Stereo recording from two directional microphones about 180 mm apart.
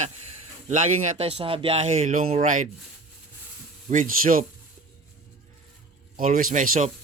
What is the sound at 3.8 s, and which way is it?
Speech, 50° right (ahead or behind).